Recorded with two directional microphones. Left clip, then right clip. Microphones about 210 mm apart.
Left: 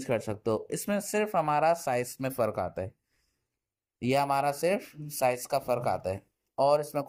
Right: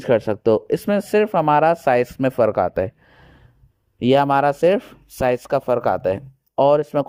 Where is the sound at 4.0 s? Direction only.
35° right (ahead or behind).